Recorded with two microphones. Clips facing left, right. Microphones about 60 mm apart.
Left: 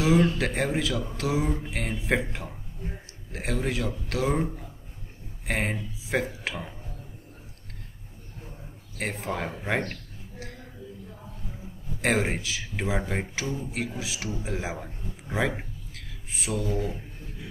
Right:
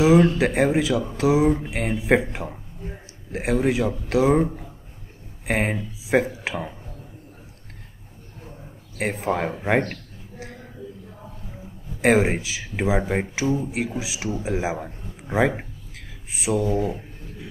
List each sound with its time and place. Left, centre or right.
0.0 s speech: centre
8.9 s speech: centre
12.0 s a man's voice: centre